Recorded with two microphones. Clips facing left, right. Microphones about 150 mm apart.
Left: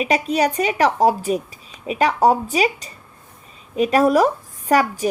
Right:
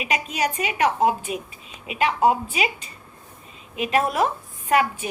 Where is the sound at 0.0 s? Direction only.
35° left (ahead or behind).